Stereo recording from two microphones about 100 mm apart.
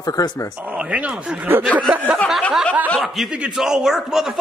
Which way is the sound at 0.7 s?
15° right (ahead or behind).